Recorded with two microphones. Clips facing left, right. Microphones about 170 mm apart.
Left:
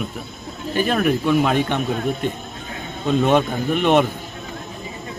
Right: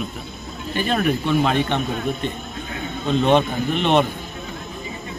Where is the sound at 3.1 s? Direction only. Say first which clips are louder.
Even; 5° left (ahead or behind).